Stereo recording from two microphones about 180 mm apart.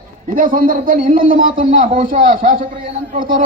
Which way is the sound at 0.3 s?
50° right (ahead or behind).